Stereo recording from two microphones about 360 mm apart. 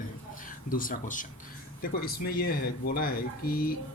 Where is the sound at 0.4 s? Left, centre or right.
Left.